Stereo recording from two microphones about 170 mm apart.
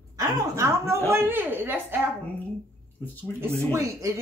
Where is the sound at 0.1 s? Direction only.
20° right (ahead or behind).